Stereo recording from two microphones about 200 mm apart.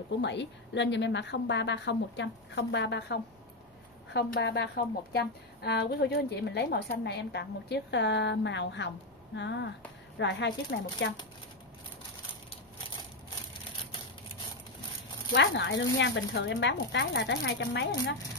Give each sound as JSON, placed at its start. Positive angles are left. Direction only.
{"t": 0.2, "sound": "a woman's voice", "side_deg": 60}
{"t": 15.3, "sound": "a woman's voice", "side_deg": 65}